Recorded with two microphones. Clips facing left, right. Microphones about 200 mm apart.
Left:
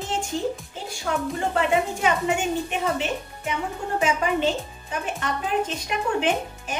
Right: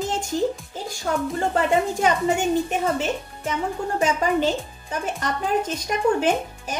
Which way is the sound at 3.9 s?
40° right (ahead or behind).